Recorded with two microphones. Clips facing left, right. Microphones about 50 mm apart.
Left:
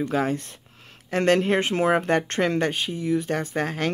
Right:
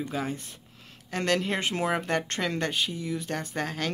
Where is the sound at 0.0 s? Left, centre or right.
Left.